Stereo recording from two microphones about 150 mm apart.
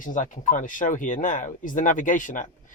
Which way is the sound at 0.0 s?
60° left (ahead or behind).